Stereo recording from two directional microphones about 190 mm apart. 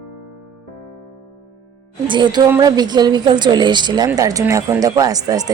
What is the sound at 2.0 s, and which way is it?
A woman's voice, 25° right (ahead or behind).